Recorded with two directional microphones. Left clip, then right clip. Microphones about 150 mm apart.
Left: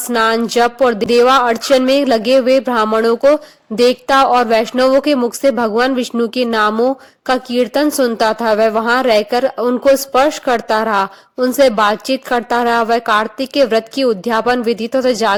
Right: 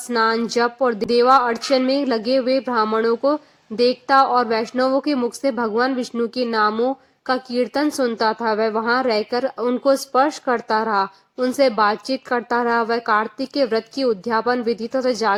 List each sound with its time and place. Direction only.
0.3 s a woman's voice: 35° left (ahead or behind)